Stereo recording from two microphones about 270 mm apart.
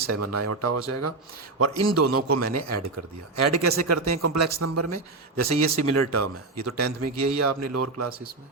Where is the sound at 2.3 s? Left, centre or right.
Right.